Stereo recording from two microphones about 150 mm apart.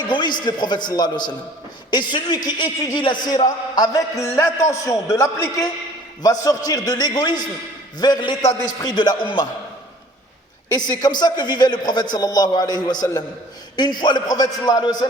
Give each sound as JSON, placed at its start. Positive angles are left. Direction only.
{"t": 0.1, "sound": "a man's voice", "side_deg": 30}
{"t": 10.7, "sound": "a man's voice", "side_deg": 25}